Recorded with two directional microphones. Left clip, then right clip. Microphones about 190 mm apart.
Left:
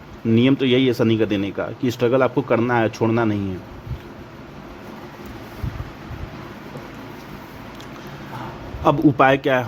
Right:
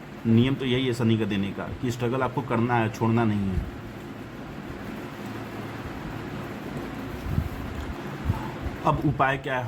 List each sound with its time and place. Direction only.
0.3 s speech: 50° left (ahead or behind)
8.8 s a man's voice: 55° left (ahead or behind)